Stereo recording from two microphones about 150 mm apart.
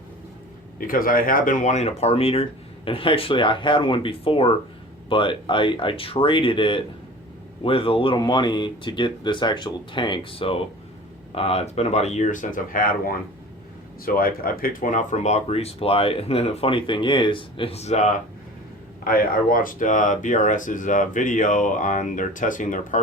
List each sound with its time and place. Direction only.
0.8 s speech: 70° left (ahead or behind); by 18.1 s 50° left (ahead or behind)
19.0 s speech: 70° left (ahead or behind)